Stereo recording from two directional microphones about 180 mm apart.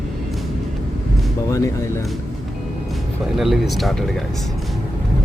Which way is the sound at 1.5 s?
15° left (ahead or behind).